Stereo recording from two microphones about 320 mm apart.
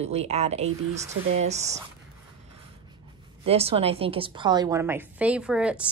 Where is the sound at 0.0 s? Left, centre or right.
Centre.